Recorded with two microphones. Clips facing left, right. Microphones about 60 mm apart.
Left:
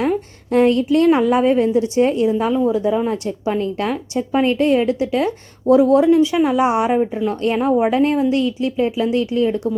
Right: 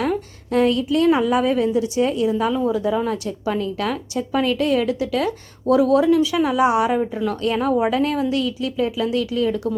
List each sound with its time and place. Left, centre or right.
0.0 s a woman's voice: left